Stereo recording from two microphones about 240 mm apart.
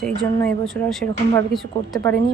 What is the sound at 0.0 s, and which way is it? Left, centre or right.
A woman's voice, centre.